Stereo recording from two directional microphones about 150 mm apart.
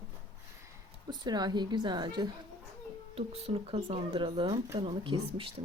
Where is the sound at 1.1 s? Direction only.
25° right (ahead or behind).